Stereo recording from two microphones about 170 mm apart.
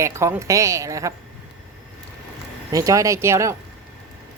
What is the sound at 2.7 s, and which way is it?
Speech, 20° right (ahead or behind).